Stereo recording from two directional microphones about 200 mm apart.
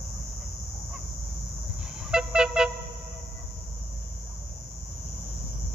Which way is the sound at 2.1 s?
5° right (ahead or behind).